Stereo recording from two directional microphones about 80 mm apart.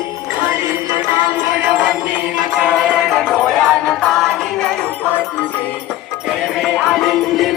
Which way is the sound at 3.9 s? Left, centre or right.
Centre.